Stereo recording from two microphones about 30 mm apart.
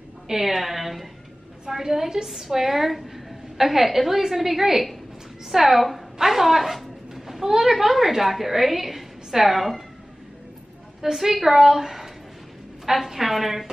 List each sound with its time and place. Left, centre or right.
0.3 s a woman's voice: centre
1.8 s a woman's voice: centre
2.2 s a woman's voice: centre
6.1 s a sound: centre
7.7 s a woman's voice: centre
11.0 s a woman's voice: centre